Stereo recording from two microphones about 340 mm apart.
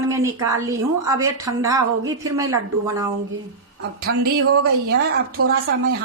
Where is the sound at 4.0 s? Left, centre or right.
Right.